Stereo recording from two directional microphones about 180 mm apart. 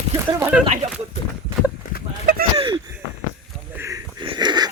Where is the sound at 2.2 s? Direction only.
55° right (ahead or behind).